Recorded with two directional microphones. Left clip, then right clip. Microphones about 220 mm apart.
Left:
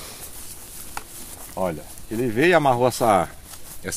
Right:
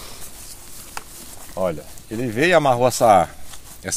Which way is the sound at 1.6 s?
40° right (ahead or behind).